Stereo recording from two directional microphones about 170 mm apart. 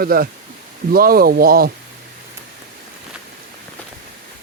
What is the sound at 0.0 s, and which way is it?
Speech, 60° right (ahead or behind).